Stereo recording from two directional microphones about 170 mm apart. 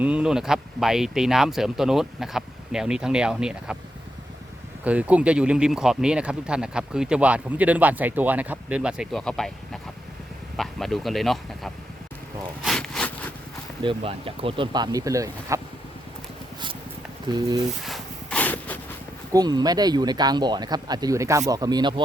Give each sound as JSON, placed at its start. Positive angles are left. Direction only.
{"t": 0.0, "sound": "speech", "side_deg": -5}
{"t": 4.8, "sound": "speech", "side_deg": -10}
{"t": 10.6, "sound": "speech", "side_deg": 0}
{"t": 12.6, "sound": "a sound", "side_deg": 5}
{"t": 13.8, "sound": "speech", "side_deg": -35}
{"t": 17.3, "sound": "speech", "side_deg": -25}
{"t": 17.8, "sound": "a sound", "side_deg": 5}
{"t": 19.3, "sound": "speech", "side_deg": -25}